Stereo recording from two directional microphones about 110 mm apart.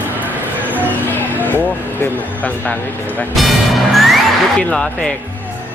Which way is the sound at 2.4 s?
15° left (ahead or behind).